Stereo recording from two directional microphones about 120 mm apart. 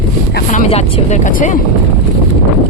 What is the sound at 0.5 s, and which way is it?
Speech, 75° left (ahead or behind).